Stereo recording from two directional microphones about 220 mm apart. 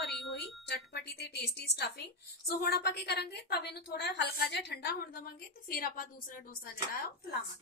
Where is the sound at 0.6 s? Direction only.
50° left (ahead or behind).